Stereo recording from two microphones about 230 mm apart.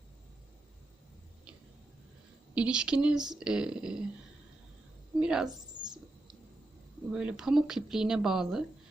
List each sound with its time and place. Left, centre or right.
2.6 s speech: centre
5.2 s speech: centre
5.5 s a sound: centre
7.1 s speech: centre